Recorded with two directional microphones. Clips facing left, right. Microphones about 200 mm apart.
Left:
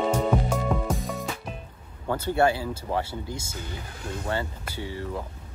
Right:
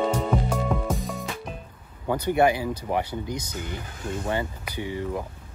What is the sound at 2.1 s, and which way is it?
Speech, 15° right (ahead or behind).